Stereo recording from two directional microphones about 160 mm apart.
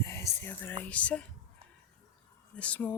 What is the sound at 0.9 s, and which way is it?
Speech, 10° left (ahead or behind).